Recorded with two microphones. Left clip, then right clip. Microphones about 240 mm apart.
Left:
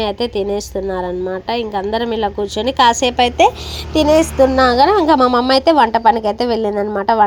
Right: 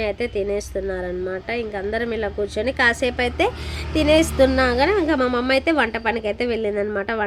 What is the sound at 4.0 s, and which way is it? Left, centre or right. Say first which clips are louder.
Speech: left 5 dB; centre.